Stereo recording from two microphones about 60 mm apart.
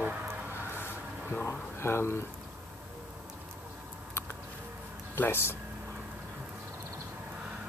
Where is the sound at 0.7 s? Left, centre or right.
Left.